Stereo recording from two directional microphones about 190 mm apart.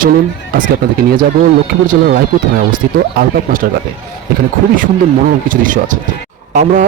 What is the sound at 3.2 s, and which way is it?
Speech, 45° right (ahead or behind).